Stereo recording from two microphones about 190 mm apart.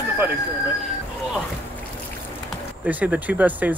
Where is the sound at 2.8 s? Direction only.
10° right (ahead or behind).